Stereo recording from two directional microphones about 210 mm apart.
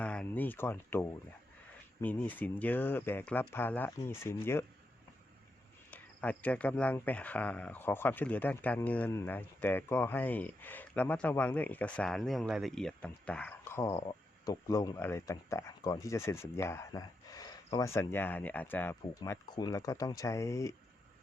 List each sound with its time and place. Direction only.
0.0 s speech: 5° left (ahead or behind)
5.9 s speech: 5° left (ahead or behind)